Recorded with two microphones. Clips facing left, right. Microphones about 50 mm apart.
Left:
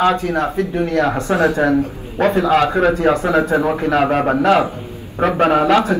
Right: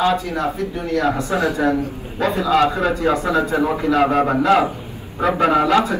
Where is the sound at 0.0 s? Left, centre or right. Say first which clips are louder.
Left 3 dB; left.